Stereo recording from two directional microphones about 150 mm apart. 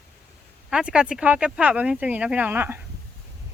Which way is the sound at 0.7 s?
5° right (ahead or behind).